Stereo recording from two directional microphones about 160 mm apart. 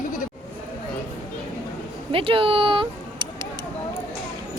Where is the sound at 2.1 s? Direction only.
35° right (ahead or behind).